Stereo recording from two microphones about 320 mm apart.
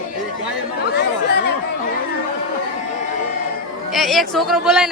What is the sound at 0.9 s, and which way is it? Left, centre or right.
Chatter, left.